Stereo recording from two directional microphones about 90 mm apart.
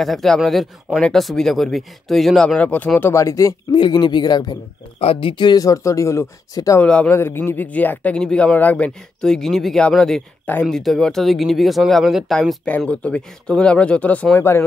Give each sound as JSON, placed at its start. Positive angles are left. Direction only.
{"t": 0.0, "sound": "speech", "side_deg": 5}
{"t": 2.6, "sound": "speech", "side_deg": 15}
{"t": 3.1, "sound": "speech", "side_deg": 35}
{"t": 3.7, "sound": "speech", "side_deg": 60}
{"t": 5.0, "sound": "speech", "side_deg": 85}
{"t": 5.6, "sound": "speech", "side_deg": 40}
{"t": 6.8, "sound": "speech", "side_deg": 15}
{"t": 7.2, "sound": "speech", "side_deg": 25}
{"t": 10.4, "sound": "speech", "side_deg": 20}
{"t": 10.7, "sound": "speech", "side_deg": 5}
{"t": 12.6, "sound": "speech", "side_deg": 15}